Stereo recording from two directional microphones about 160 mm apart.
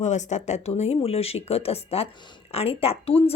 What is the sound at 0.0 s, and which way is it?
Speech, 45° left (ahead or behind).